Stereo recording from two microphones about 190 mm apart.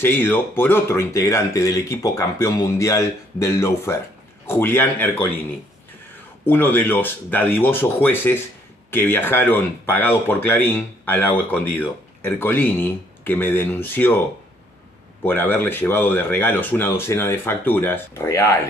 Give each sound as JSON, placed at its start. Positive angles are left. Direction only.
{"t": 0.0, "sound": "speech", "side_deg": 10}
{"t": 6.4, "sound": "speech", "side_deg": 10}
{"t": 15.2, "sound": "speech", "side_deg": 10}